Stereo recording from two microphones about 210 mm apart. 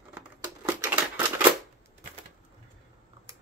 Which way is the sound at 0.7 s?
10° right (ahead or behind).